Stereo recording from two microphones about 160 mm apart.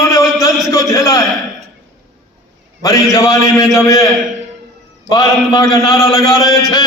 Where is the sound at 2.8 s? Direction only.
20° left (ahead or behind).